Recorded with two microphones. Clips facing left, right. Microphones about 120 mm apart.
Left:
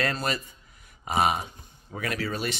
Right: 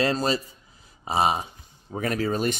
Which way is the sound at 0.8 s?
30° right (ahead or behind).